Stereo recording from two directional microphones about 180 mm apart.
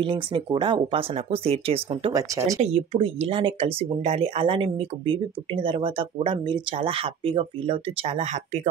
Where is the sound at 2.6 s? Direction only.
30° right (ahead or behind).